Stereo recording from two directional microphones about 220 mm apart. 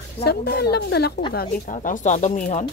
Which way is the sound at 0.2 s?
45° left (ahead or behind).